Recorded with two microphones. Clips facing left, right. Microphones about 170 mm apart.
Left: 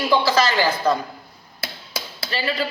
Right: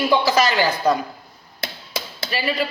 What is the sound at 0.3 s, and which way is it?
Speech, 15° right (ahead or behind).